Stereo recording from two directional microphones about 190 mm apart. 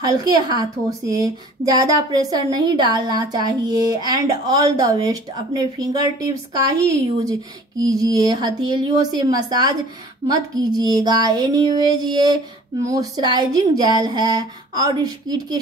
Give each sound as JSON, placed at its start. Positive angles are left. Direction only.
{"t": 0.0, "sound": "a woman's voice", "side_deg": -20}
{"t": 7.8, "sound": "a woman's voice", "side_deg": -20}